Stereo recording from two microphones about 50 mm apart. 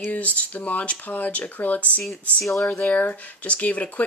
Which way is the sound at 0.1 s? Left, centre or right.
Left.